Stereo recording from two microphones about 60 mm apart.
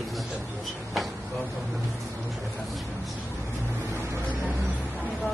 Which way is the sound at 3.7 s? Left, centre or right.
Right.